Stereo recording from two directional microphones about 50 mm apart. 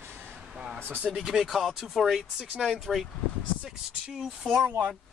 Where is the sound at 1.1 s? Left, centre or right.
Centre.